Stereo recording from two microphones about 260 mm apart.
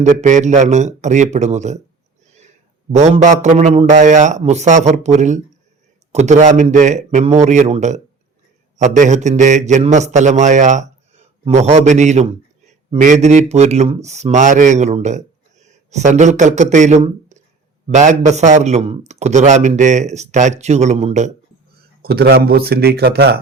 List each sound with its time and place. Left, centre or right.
0.0 s a man's voice: right
2.9 s a man's voice: right
22.0 s a man's voice: right